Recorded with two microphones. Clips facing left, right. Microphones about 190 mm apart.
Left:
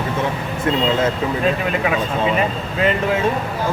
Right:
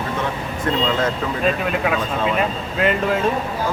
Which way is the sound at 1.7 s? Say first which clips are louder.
Left 1 dB; centre (ahead or behind).